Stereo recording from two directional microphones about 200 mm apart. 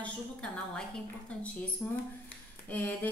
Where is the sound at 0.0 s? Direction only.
5° left (ahead or behind).